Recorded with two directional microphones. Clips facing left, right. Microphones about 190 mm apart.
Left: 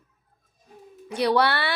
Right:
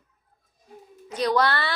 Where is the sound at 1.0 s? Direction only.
10° left (ahead or behind).